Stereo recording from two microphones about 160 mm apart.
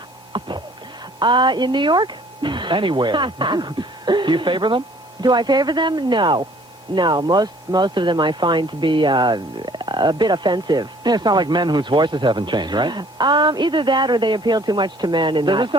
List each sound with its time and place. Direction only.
0.3 s speech: 30° right (ahead or behind)